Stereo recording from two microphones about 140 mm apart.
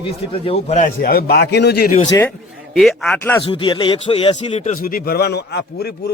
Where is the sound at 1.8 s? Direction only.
65° left (ahead or behind).